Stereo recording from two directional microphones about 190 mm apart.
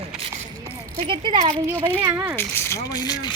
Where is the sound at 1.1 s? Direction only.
25° right (ahead or behind).